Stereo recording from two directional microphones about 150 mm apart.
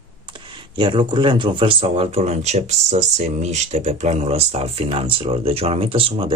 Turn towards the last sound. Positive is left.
turn(degrees=-35)  # may be behind; listen again after turning